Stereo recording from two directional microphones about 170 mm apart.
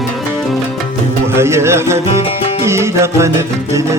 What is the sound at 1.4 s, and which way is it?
Speech, 15° right (ahead or behind).